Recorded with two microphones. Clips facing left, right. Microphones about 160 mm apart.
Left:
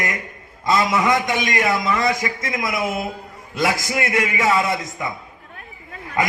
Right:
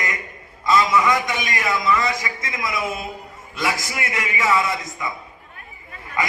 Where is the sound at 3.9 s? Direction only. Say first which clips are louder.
Left 6 dB; 50° left (ahead or behind).